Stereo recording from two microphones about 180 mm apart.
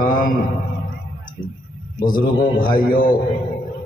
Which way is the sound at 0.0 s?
50° left (ahead or behind).